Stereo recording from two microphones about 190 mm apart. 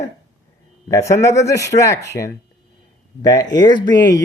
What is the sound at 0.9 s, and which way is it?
Speech, 15° left (ahead or behind).